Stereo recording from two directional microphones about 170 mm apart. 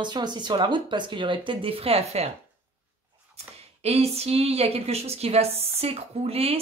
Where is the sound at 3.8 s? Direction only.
35° right (ahead or behind).